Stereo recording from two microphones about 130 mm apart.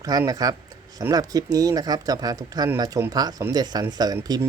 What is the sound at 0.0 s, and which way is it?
A man's voice, 30° right (ahead or behind).